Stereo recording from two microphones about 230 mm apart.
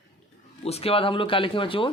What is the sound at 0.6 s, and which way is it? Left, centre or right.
Speech, left.